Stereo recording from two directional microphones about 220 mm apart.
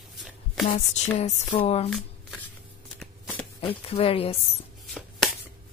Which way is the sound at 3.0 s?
5° left (ahead or behind).